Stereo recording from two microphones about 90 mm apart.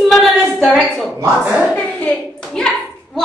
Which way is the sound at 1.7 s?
15° left (ahead or behind).